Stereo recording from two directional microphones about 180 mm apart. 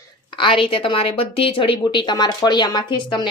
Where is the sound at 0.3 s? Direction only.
30° left (ahead or behind).